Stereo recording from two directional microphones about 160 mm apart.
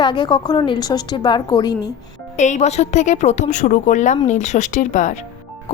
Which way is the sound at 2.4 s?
45° left (ahead or behind).